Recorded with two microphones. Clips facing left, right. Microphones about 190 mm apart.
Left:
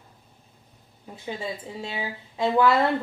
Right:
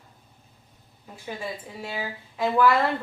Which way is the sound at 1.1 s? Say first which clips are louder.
Left 2 dB; 20° left (ahead or behind).